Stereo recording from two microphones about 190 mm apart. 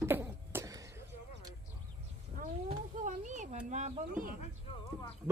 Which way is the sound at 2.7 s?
40° right (ahead or behind).